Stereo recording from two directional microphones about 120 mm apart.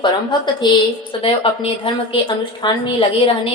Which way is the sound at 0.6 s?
35° left (ahead or behind).